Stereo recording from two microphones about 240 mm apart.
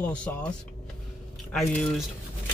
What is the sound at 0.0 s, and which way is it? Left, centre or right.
Speech, centre.